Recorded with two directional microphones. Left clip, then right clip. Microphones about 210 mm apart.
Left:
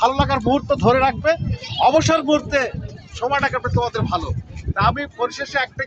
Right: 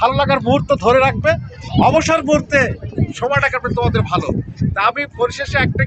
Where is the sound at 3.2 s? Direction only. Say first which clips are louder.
Right 3 dB; 20° right (ahead or behind).